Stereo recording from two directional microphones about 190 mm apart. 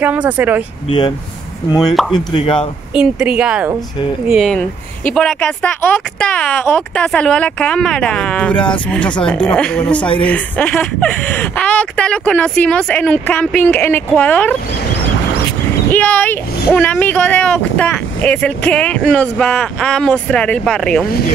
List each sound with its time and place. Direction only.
0.0 s speech: 10° right (ahead or behind)
0.8 s speech: 25° left (ahead or behind)
2.9 s speech: 5° right (ahead or behind)
9.9 s speech: 25° left (ahead or behind)
10.2 s speech: 5° left (ahead or behind)
15.9 s speech: 10° left (ahead or behind)